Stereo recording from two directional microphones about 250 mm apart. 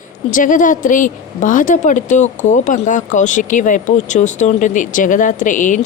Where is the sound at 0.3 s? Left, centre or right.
Left.